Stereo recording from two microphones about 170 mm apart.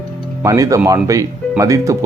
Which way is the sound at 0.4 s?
20° right (ahead or behind).